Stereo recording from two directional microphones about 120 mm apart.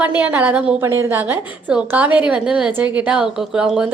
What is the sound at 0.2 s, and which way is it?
A woman's voice, 10° right (ahead or behind).